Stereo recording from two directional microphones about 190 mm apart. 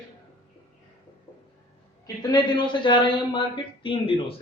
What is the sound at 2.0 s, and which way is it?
A man's voice, 20° left (ahead or behind).